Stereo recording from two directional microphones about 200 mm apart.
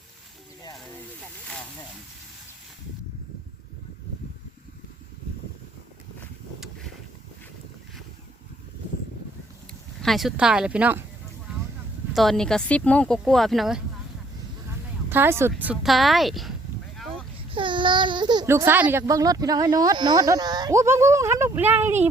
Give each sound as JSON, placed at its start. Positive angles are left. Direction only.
{"t": 10.0, "sound": "speech", "side_deg": 0}
{"t": 12.1, "sound": "speech", "side_deg": 0}
{"t": 15.1, "sound": "speech", "side_deg": -10}
{"t": 17.5, "sound": "speech", "side_deg": -25}